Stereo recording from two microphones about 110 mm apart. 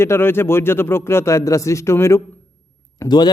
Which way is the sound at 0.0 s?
20° left (ahead or behind).